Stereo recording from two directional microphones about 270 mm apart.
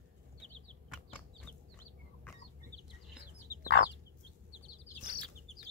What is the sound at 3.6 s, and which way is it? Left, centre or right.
Chicken, left.